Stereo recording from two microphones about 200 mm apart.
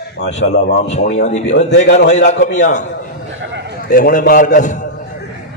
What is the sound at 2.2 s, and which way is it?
Speech, 65° left (ahead or behind).